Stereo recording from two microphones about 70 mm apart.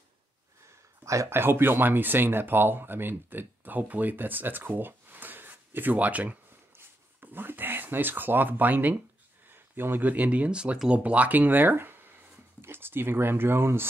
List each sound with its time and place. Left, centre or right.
1.0 s speech: right
1.3 s speech: right